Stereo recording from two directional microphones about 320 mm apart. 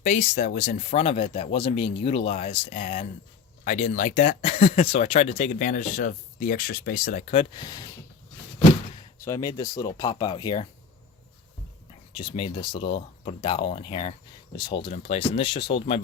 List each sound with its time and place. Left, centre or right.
0.0 s speech: left
9.2 s speech: centre
12.1 s speech: centre